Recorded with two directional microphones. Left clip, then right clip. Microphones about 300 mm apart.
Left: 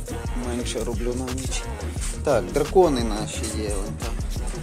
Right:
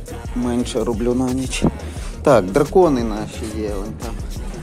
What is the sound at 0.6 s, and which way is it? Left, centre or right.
Speech, centre.